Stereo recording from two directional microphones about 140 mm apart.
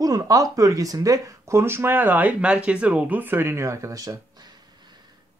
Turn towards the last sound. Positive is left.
turn(degrees=-25)  # may be behind; listen again after turning